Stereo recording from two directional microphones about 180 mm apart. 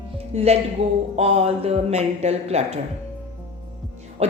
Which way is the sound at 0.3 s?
35° right (ahead or behind).